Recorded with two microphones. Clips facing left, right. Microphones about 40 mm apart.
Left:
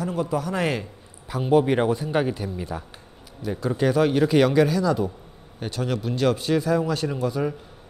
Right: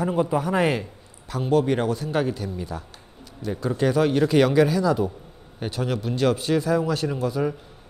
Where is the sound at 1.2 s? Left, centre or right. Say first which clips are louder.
Left 2 dB; centre.